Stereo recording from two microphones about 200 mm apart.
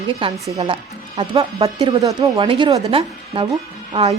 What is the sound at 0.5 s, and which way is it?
Speech, 25° right (ahead or behind).